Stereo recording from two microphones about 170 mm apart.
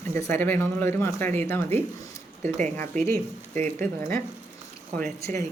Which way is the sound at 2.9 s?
50° right (ahead or behind).